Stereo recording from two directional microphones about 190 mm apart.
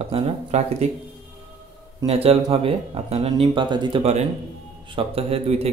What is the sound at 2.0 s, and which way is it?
Speech, 30° right (ahead or behind).